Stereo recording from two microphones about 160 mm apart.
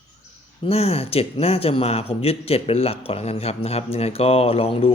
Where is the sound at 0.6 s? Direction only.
40° left (ahead or behind).